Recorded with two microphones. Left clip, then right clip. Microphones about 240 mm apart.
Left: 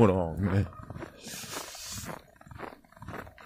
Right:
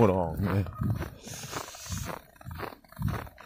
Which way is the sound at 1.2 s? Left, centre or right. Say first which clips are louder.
Left 1 dB; centre.